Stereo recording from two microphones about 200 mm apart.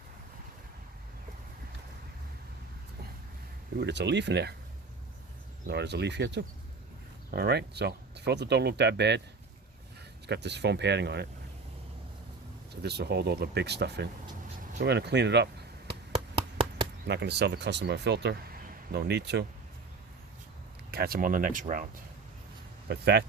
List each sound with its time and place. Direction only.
3.8 s speech: 60° right (ahead or behind)
5.6 s speech: 55° right (ahead or behind)
10.2 s speech: 60° right (ahead or behind)
12.7 s speech: 55° right (ahead or behind)
15.9 s a sound: 25° right (ahead or behind)
17.1 s speech: 55° right (ahead or behind)
20.9 s speech: 50° right (ahead or behind)
22.9 s speech: 55° right (ahead or behind)